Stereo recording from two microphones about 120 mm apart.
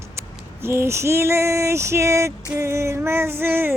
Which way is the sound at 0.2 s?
20° right (ahead or behind).